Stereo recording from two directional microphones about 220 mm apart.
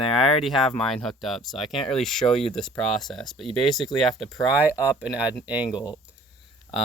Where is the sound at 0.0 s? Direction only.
25° left (ahead or behind).